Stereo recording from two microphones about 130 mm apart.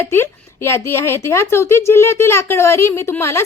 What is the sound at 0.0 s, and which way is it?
A woman's voice, 15° left (ahead or behind).